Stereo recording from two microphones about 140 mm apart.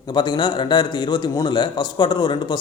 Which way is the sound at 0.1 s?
30° left (ahead or behind).